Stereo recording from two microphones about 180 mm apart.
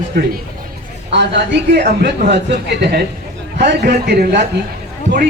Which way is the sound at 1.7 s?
65° right (ahead or behind).